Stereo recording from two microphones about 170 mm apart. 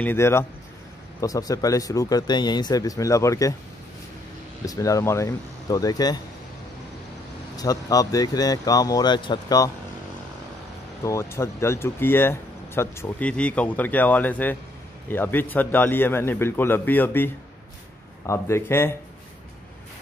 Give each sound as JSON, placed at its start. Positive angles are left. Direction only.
{"t": 0.0, "sound": "speech", "side_deg": 15}
{"t": 4.6, "sound": "speech", "side_deg": 20}
{"t": 7.5, "sound": "speech", "side_deg": 20}
{"t": 11.1, "sound": "speech", "side_deg": 15}